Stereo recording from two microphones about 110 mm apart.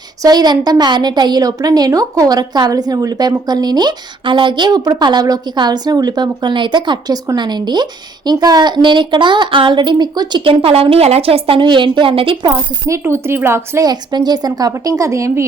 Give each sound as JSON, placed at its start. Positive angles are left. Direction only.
{"t": 0.2, "sound": "a woman's voice", "side_deg": -35}
{"t": 12.9, "sound": "speech", "side_deg": -25}
{"t": 13.9, "sound": "a woman's voice", "side_deg": -40}